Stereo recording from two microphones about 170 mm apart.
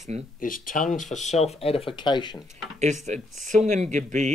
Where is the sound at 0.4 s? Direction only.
55° left (ahead or behind); by 2.3 s 25° left (ahead or behind).